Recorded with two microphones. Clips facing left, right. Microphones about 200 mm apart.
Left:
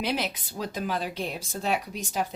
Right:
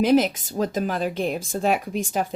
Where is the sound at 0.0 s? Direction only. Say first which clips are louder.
Right 11 dB; 45° right (ahead or behind).